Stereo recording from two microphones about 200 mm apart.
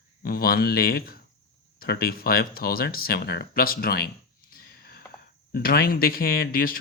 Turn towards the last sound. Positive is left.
turn(degrees=50)  # may be behind; listen again after turning